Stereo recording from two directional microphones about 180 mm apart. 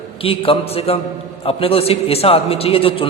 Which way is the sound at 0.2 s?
30° left (ahead or behind).